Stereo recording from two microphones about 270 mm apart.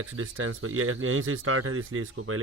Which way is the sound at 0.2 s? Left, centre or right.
Right.